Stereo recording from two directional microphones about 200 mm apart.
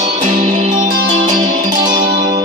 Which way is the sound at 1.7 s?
20° right (ahead or behind).